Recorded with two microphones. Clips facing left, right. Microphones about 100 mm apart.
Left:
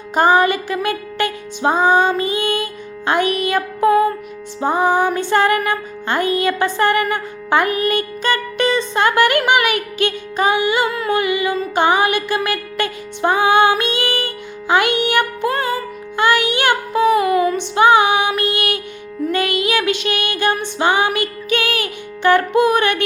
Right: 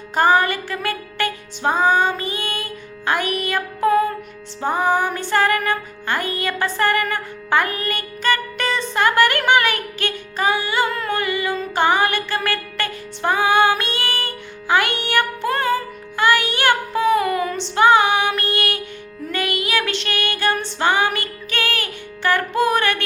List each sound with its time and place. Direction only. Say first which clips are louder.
0.1 s music: left 3 dB; 20° left (ahead or behind)
10.9 s humming: left 4 dB; 5° left (ahead or behind)
11.2 s music: left 4 dB; 15° left (ahead or behind)